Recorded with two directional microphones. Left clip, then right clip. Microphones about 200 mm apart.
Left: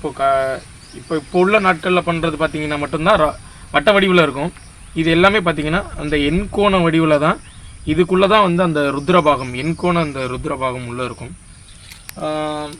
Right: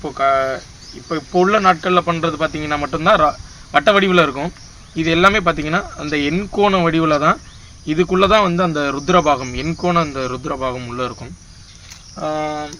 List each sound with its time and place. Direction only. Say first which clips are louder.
0.0 s speech: even; 25° left (ahead or behind)